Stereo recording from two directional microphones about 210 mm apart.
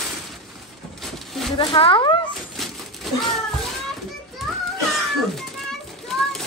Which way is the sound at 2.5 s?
Centre (ahead or behind).